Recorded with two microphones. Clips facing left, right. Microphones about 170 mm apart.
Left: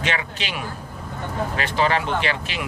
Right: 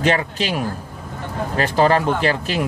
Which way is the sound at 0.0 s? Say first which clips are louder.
Right 8 dB; 40° right (ahead or behind).